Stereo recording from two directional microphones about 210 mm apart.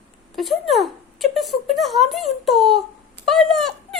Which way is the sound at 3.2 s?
Centre (ahead or behind).